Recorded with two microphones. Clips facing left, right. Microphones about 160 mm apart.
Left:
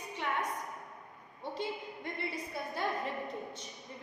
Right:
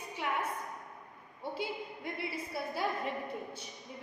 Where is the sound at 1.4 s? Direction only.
5° right (ahead or behind).